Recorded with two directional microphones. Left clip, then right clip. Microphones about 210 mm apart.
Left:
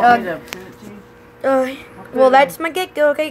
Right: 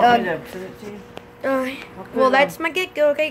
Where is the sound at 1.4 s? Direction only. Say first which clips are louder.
Left 6 dB; 10° left (ahead or behind).